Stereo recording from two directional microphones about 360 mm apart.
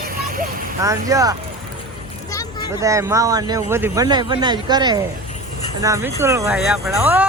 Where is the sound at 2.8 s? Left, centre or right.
Centre.